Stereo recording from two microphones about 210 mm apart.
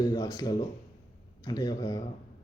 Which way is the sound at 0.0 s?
15° left (ahead or behind).